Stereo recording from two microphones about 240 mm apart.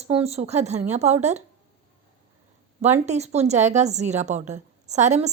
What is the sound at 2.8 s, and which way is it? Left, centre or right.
Speech, right.